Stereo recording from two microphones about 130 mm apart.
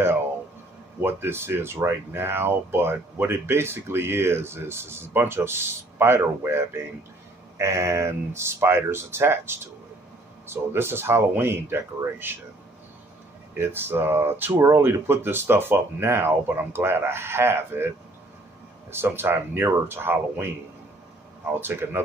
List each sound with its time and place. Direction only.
1.0 s speech: 20° right (ahead or behind)
13.6 s speech: 15° right (ahead or behind)
18.9 s speech: 20° right (ahead or behind)
21.5 s speech: 15° right (ahead or behind)